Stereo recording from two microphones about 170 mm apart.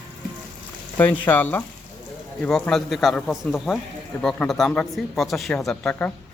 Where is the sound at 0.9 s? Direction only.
10° left (ahead or behind).